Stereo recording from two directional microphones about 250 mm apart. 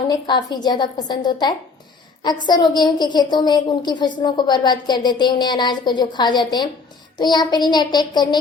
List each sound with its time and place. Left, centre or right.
0.1 s a woman's voice: centre